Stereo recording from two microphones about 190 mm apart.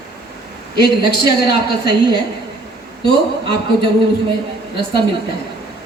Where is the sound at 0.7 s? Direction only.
55° left (ahead or behind).